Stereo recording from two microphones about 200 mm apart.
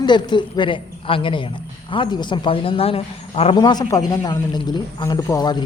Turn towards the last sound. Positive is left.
turn(degrees=20)  # may be behind; listen again after turning